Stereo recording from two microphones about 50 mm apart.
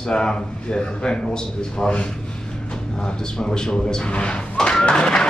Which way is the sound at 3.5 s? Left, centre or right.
Centre.